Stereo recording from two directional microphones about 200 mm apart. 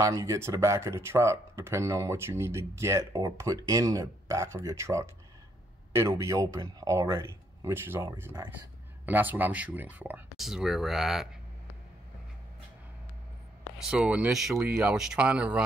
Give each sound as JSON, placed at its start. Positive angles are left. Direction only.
{"t": 0.0, "sound": "speech", "side_deg": -15}
{"t": 13.7, "sound": "speech", "side_deg": -5}